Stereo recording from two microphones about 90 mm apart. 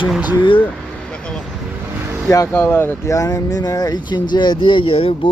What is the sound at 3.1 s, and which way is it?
Speech, 40° left (ahead or behind).